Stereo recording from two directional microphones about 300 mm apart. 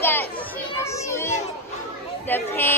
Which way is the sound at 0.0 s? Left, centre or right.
Centre.